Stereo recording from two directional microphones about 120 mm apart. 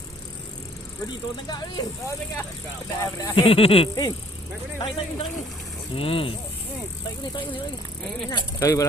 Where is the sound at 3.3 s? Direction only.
50° left (ahead or behind).